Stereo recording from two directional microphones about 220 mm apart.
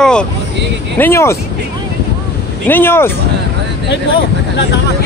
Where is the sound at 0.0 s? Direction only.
5° left (ahead or behind).